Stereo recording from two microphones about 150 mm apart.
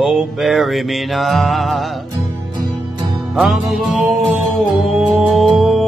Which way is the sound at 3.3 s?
Centre (ahead or behind).